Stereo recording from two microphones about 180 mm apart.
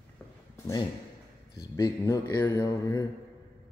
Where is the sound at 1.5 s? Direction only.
20° left (ahead or behind).